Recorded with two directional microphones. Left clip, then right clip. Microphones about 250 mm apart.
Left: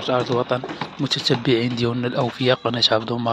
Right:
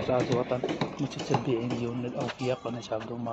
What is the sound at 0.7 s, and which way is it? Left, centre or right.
Speech, right.